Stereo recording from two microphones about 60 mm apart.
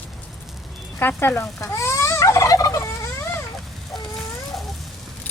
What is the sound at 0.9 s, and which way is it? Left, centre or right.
Speech, left.